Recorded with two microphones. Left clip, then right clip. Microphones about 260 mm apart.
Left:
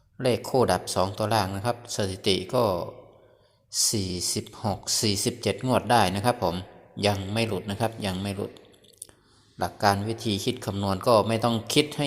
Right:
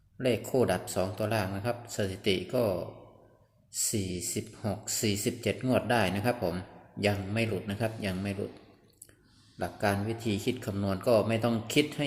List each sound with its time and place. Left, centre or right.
0.2 s speech: centre
9.6 s speech: centre